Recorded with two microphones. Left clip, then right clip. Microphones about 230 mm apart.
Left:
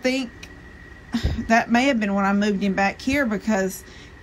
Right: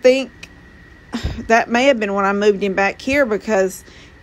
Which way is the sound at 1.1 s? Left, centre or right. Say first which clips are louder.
Right 5 dB; right.